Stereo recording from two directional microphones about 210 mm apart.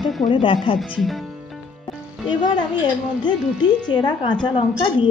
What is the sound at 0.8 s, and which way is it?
Speech, centre (ahead or behind).